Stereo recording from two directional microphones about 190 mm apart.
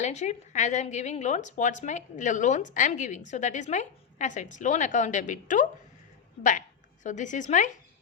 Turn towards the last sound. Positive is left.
turn(degrees=40)  # may be behind; listen again after turning